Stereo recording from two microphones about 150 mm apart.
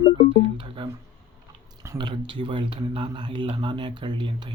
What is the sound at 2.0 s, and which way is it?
Speech, 30° right (ahead or behind).